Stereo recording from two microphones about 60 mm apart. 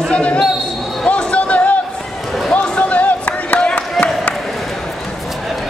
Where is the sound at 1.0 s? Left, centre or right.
Left.